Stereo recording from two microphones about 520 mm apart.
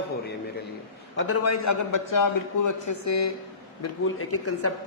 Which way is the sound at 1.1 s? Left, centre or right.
Left.